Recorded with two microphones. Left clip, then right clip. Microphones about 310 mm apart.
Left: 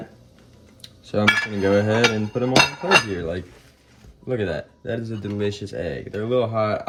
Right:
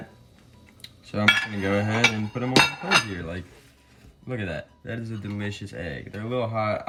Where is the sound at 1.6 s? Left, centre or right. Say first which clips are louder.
Left 6 dB; centre.